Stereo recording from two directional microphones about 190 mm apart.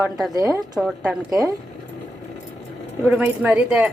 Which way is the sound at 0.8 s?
5° right (ahead or behind).